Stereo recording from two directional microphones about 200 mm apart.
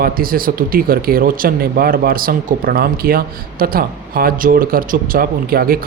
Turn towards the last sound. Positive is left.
turn(degrees=-50)  # may be behind; listen again after turning